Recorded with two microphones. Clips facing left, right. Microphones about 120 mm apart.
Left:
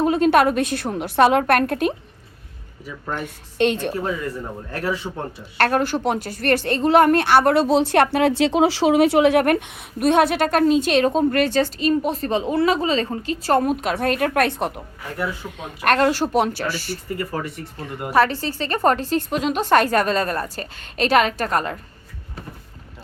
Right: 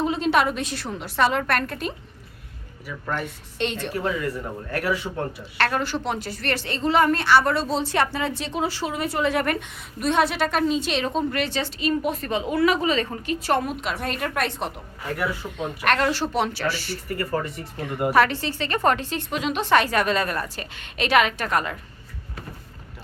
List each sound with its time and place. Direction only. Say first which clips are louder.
0.0 s a woman's voice: left 5 dB; 55° left (ahead or behind)
3.6 s a woman's voice: left 8 dB; 50° left (ahead or behind)
3.9 s speech: left 1 dB; 25° left (ahead or behind)
5.5 s a woman's voice: left 5 dB; 45° left (ahead or behind)
13.9 s a woman's voice: left 7 dB; 55° left (ahead or behind)
15.8 s a woman's voice: left 5 dB; 40° left (ahead or behind)
17.3 s speech: right 1 dB; centre (ahead or behind)
18.1 s a woman's voice: left 3 dB; 35° left (ahead or behind)